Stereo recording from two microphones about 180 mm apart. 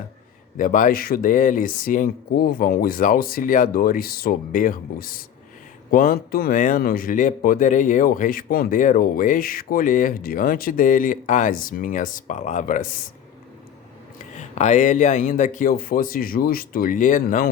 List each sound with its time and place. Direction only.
0.5 s speech: 45° left (ahead or behind)
14.3 s speech: 40° left (ahead or behind)